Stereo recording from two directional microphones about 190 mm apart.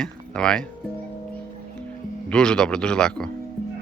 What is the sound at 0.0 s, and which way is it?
Speech, 5° left (ahead or behind).